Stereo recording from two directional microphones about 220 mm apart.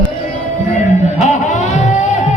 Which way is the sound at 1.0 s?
35° left (ahead or behind).